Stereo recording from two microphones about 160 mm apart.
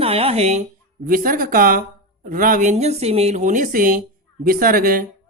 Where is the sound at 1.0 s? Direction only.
60° right (ahead or behind).